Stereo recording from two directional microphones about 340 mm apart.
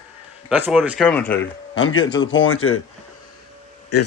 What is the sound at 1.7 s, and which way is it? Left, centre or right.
Speech, left.